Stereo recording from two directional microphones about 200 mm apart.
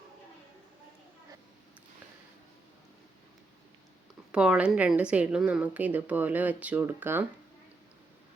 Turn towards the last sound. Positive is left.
turn(degrees=-10)  # may be behind; listen again after turning